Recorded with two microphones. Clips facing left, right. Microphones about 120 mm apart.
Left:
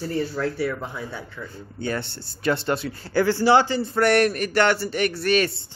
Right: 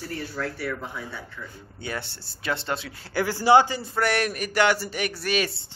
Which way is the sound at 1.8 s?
5° right (ahead or behind).